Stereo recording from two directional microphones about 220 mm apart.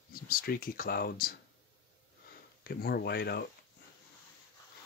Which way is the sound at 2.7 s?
45° left (ahead or behind).